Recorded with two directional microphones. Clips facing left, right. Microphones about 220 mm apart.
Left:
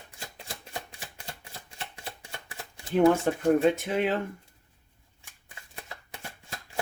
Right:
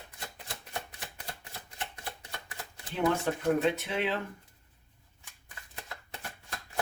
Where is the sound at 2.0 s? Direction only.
30° left (ahead or behind).